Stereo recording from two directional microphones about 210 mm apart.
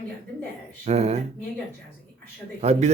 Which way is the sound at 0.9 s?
30° right (ahead or behind).